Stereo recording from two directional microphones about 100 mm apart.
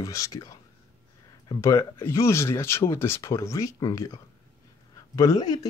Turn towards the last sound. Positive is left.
turn(degrees=40)  # may be behind; listen again after turning